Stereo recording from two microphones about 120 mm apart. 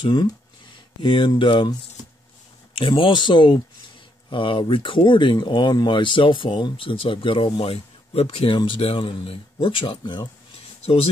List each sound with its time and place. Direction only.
0.0 s speech: 45° left (ahead or behind)